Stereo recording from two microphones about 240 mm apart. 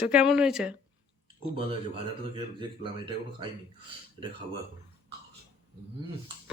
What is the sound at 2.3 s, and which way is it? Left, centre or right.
Speech, right.